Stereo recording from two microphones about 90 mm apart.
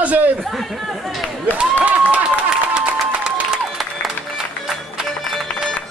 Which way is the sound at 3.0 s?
5° right (ahead or behind).